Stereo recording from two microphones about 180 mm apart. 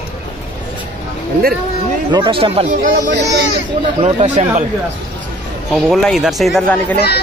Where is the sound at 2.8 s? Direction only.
70° right (ahead or behind).